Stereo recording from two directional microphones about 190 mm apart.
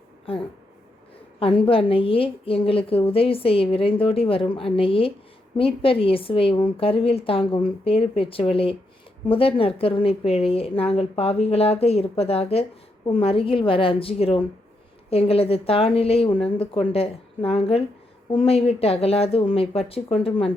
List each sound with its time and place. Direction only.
0.3 s a woman's voice: 30° left (ahead or behind)